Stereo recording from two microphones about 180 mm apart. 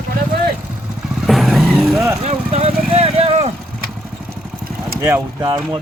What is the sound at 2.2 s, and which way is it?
Vehicle, 35° right (ahead or behind).